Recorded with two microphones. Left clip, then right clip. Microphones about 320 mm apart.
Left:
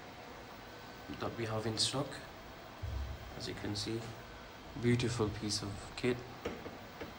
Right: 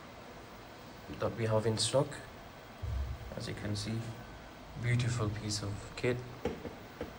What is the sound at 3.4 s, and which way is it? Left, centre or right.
A man's voice, centre.